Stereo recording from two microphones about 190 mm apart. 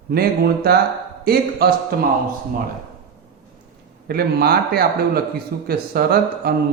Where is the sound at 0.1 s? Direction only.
55° right (ahead or behind).